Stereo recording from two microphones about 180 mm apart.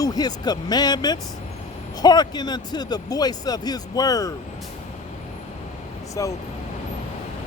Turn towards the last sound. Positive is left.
turn(degrees=20)  # may be behind; listen again after turning